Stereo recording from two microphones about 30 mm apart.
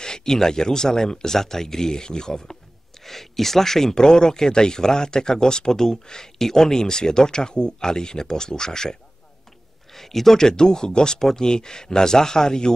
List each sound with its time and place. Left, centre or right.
0.0 s speech: left
3.0 s speech: centre
9.9 s speech: centre